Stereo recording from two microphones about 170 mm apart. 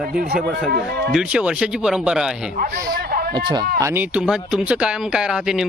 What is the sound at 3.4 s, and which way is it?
Speech, 25° right (ahead or behind).